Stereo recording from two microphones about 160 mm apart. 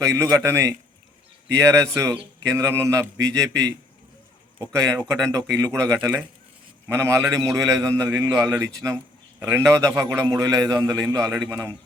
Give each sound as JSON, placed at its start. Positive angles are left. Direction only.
{"t": 0.0, "sound": "a man's voice", "side_deg": -20}